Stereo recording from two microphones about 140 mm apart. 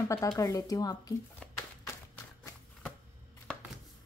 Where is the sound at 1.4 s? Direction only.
5° left (ahead or behind).